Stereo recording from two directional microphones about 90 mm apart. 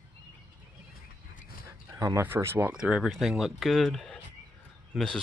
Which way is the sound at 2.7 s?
10° right (ahead or behind).